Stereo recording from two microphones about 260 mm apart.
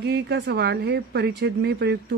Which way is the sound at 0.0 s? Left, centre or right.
Right.